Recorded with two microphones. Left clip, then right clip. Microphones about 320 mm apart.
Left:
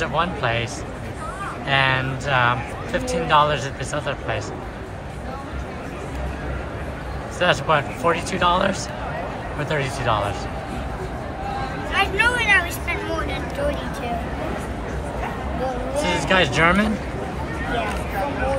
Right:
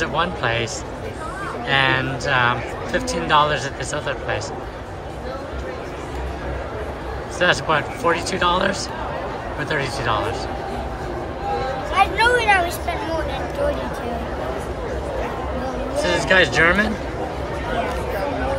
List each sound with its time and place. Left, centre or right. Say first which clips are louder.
0.0 s a man's voice: right 1 dB; centre
1.7 s a man's voice: right 1 dB; centre
7.3 s a man's voice: right 1 dB; centre
11.9 s a sound: right 3 dB; centre
16.0 s a man's voice: right 3 dB; centre